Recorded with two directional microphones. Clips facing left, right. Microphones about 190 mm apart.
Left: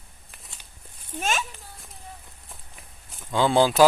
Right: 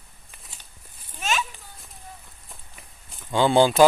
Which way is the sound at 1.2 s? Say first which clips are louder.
Even; 50° left (ahead or behind).